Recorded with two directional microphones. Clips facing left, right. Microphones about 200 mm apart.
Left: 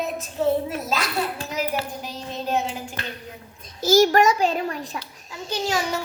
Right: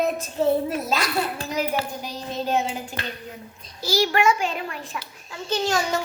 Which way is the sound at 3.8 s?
45° left (ahead or behind).